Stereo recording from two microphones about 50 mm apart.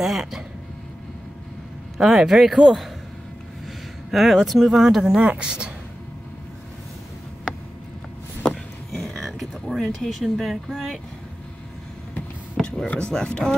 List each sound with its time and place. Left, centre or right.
0.0 s speech: centre
2.0 s speech: centre
4.1 s speech: centre
5.1 s speech: right
7.5 s a sound: centre
8.9 s speech: centre
12.8 s speech: left